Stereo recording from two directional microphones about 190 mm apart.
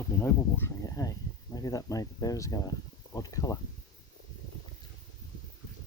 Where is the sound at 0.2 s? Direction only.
15° left (ahead or behind).